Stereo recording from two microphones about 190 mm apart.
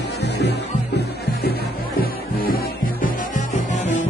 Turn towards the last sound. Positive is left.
turn(degrees=40)  # may be behind; listen again after turning